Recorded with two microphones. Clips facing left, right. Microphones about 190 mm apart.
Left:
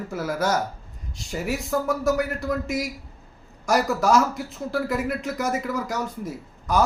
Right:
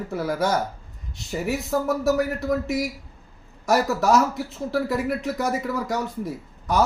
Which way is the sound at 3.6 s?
5° right (ahead or behind).